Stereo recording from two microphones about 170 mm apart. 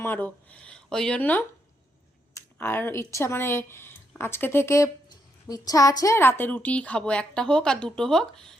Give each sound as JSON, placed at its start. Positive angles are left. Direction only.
{"t": 0.0, "sound": "a woman's voice", "side_deg": 10}